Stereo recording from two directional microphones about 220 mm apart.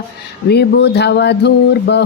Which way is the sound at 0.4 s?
50° left (ahead or behind).